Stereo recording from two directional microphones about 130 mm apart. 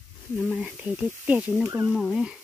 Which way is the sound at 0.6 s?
10° right (ahead or behind).